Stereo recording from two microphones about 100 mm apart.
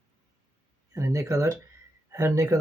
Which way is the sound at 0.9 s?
30° right (ahead or behind).